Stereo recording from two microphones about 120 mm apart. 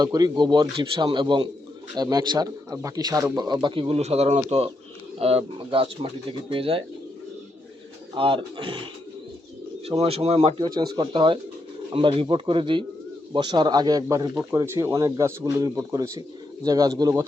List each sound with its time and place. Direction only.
0.0 s a man's voice: 35° right (ahead or behind); by 6.8 s 50° right (ahead or behind)
8.1 s speech: 45° right (ahead or behind)
10.0 s speech: 55° right (ahead or behind)
10.6 s a man's voice: 35° right (ahead or behind)